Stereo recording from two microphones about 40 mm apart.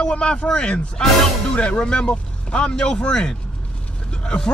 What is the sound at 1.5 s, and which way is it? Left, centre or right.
Speech, left.